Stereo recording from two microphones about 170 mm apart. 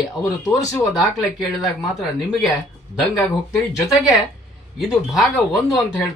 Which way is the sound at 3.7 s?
20° left (ahead or behind).